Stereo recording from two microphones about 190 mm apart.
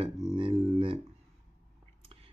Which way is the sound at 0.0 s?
30° right (ahead or behind).